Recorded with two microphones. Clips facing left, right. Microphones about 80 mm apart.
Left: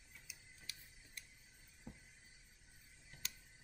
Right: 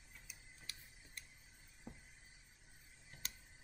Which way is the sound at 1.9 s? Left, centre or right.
Right.